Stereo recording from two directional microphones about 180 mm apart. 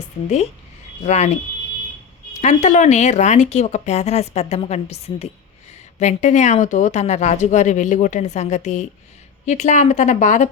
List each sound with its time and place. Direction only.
1.0 s speech: 40° left (ahead or behind)
2.4 s speech: 40° left (ahead or behind)